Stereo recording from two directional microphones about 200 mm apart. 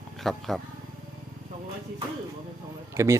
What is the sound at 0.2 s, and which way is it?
Speech, centre (ahead or behind).